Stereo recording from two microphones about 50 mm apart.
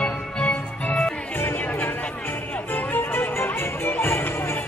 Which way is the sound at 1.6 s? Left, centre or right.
Left.